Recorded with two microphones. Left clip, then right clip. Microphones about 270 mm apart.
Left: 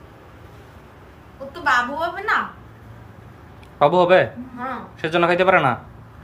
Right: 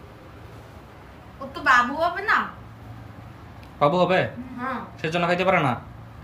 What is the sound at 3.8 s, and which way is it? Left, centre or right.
A man's voice, centre.